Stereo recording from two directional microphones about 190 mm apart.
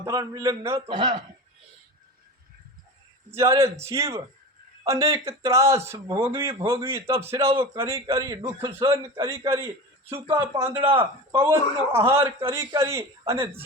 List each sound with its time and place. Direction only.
0.0 s a man's voice: 15° right (ahead or behind)
3.6 s a man's voice: 15° right (ahead or behind)
10.7 s speech: 25° right (ahead or behind)
11.3 s a man's voice: 10° right (ahead or behind)